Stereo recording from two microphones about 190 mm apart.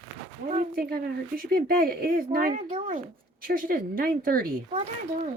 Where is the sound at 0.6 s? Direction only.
50° right (ahead or behind).